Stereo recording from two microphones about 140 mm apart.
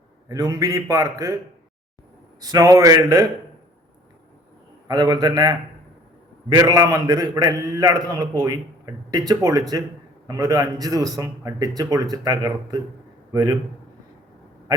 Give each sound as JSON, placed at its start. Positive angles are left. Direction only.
{"t": 0.3, "sound": "a man's voice", "side_deg": -25}
{"t": 2.4, "sound": "a man's voice", "side_deg": -25}
{"t": 4.9, "sound": "a man's voice", "side_deg": -30}